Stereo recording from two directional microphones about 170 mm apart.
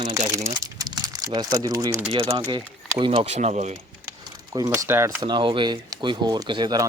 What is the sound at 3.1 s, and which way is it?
Speech, 40° right (ahead or behind).